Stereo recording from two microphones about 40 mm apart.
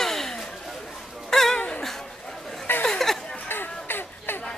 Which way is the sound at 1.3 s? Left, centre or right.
Centre.